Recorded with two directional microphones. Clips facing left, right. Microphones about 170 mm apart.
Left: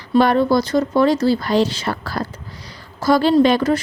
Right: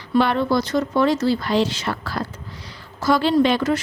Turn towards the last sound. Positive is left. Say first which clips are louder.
# left 4 dB
turn(degrees=40)  # may be behind; listen again after turning